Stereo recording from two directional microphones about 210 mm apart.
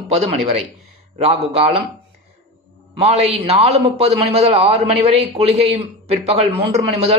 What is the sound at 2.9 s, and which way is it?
A woman's voice, 30° right (ahead or behind).